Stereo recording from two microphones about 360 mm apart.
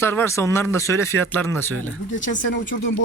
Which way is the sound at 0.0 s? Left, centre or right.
Centre.